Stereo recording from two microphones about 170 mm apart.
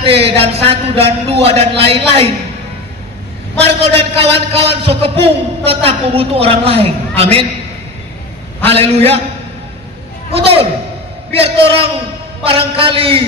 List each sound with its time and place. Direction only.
0.0 s a man's voice: 35° right (ahead or behind)
3.8 s a man's voice: 35° right (ahead or behind)
8.6 s a man's voice: 35° right (ahead or behind)
10.3 s a man's voice: 35° right (ahead or behind)